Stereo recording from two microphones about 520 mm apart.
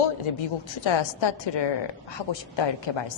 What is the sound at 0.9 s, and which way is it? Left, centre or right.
A woman's voice, left.